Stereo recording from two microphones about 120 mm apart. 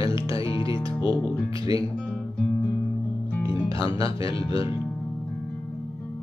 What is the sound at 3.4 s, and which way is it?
Music, 45° left (ahead or behind).